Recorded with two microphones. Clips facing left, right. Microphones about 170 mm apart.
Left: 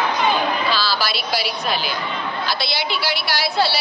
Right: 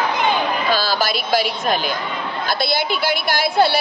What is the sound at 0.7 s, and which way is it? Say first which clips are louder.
A woman's voice: right 3 dB; 50° right (ahead or behind).